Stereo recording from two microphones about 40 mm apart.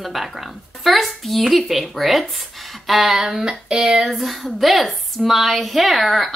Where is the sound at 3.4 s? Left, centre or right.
Centre.